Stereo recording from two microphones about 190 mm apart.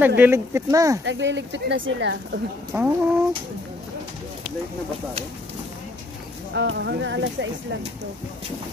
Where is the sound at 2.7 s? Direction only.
15° right (ahead or behind).